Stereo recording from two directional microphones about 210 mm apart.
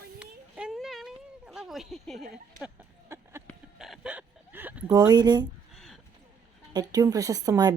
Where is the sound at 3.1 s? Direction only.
10° right (ahead or behind).